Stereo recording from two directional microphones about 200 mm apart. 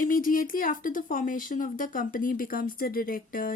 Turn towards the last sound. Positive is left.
turn(degrees=45)  # may be behind; listen again after turning